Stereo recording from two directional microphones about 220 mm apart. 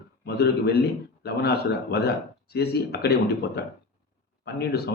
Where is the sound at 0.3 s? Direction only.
45° left (ahead or behind).